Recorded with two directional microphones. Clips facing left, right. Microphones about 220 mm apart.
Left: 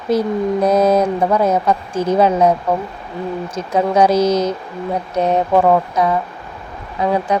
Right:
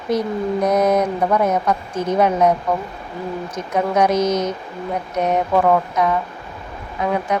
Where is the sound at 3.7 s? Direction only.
30° left (ahead or behind).